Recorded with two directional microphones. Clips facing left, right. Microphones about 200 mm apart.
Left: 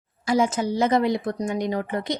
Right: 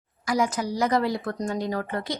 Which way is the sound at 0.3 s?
25° left (ahead or behind).